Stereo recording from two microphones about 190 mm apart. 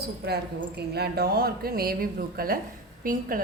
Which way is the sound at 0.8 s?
55° right (ahead or behind).